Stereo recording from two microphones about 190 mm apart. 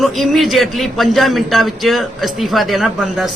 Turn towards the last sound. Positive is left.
turn(degrees=0)  # may be behind; listen again after turning